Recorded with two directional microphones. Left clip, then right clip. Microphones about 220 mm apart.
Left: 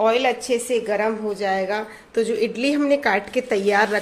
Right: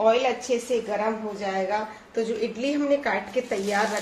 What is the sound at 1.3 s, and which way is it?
A woman's voice, 45° left (ahead or behind).